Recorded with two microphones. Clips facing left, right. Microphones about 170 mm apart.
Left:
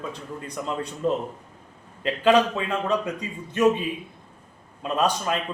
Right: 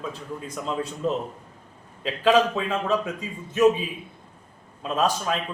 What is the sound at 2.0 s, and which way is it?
A man's voice, centre (ahead or behind).